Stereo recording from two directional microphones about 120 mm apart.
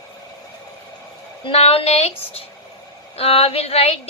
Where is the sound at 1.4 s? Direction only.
55° left (ahead or behind).